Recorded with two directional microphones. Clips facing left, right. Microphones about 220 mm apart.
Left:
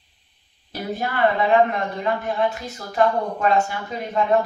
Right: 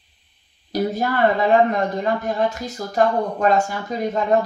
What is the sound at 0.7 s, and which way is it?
Speech, 40° right (ahead or behind).